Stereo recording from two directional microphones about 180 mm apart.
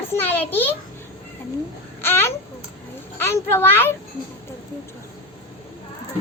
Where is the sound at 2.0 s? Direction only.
10° left (ahead or behind).